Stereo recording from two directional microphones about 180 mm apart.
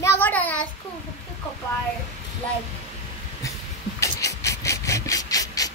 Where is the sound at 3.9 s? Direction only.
15° left (ahead or behind).